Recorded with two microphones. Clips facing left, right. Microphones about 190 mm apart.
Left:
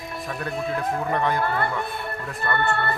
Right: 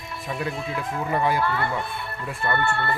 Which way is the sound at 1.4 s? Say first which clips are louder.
Left 1 dB; 50° left (ahead or behind).